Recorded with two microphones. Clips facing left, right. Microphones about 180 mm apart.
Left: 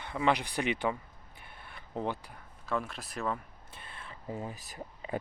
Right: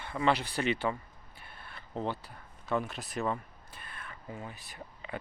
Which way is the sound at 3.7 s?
25° left (ahead or behind).